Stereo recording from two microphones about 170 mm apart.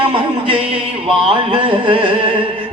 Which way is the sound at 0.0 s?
30° right (ahead or behind).